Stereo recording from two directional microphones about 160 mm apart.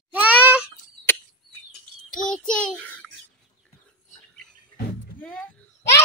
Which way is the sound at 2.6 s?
5° left (ahead or behind).